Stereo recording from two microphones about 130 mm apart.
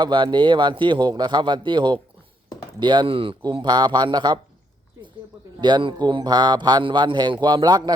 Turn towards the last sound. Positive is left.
turn(degrees=-35)  # may be behind; listen again after turning